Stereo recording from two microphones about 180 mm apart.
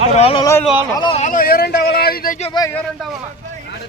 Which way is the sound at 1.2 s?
50° left (ahead or behind).